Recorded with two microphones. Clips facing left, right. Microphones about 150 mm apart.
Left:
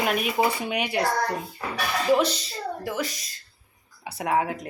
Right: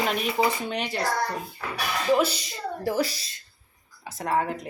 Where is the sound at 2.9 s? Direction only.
35° right (ahead or behind).